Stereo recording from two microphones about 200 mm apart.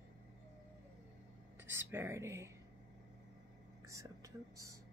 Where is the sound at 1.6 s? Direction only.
10° right (ahead or behind).